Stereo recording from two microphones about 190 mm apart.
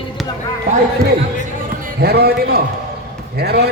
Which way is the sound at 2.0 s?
55° right (ahead or behind).